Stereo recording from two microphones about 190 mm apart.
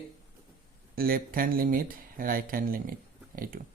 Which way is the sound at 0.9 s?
50° right (ahead or behind).